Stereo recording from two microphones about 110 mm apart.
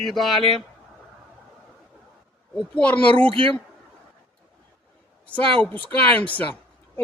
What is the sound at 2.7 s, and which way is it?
Speech, 10° left (ahead or behind).